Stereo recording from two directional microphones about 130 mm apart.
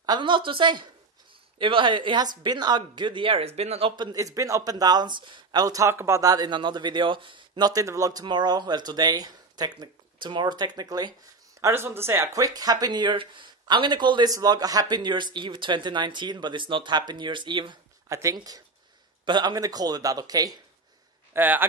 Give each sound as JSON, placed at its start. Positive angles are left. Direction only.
{"t": 0.0, "sound": "speech", "side_deg": -35}
{"t": 3.9, "sound": "speech", "side_deg": -30}
{"t": 11.6, "sound": "speech", "side_deg": -20}
{"t": 12.4, "sound": "speech", "side_deg": -30}
{"t": 18.0, "sound": "speech", "side_deg": -25}
{"t": 21.3, "sound": "speech", "side_deg": -15}